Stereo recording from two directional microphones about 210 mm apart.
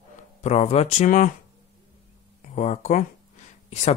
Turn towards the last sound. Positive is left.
turn(degrees=30)  # may be behind; listen again after turning